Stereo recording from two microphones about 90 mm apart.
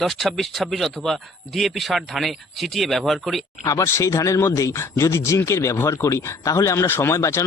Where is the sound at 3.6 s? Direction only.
40° left (ahead or behind).